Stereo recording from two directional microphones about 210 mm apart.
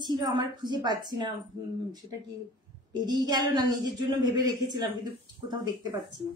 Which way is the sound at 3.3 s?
20° right (ahead or behind).